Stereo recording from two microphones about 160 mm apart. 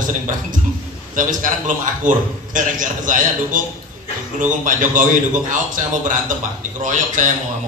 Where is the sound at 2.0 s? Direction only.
55° right (ahead or behind).